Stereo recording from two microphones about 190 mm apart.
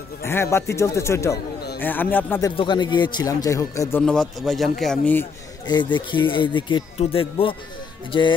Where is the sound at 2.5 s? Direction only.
25° left (ahead or behind); by 5.2 s 5° left (ahead or behind).